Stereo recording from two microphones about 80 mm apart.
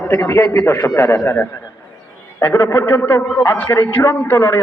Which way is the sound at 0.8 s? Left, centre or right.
Left.